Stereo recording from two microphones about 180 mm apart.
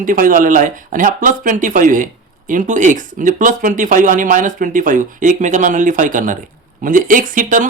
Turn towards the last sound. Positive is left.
turn(degrees=-45)  # may be behind; listen again after turning